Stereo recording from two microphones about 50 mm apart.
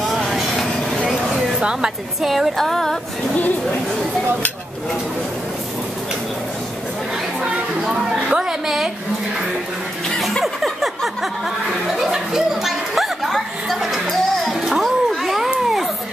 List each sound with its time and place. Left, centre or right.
0.0 s train: centre
0.5 s vehicle: centre
1.0 s a sound: centre
1.6 s a woman's voice: centre
2.2 s speech: centre
7.4 s a child's voice: centre
10.0 s chuckle: centre
10.4 s a sound: centre